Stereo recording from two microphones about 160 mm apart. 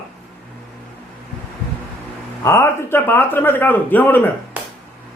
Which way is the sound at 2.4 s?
15° left (ahead or behind).